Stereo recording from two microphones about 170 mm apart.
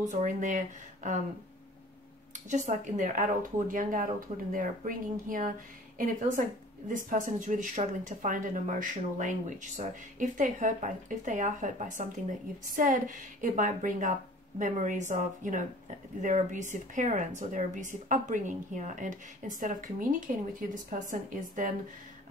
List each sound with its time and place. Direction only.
0.0 s speech: 45° right (ahead or behind)
2.3 s speech: 45° right (ahead or behind)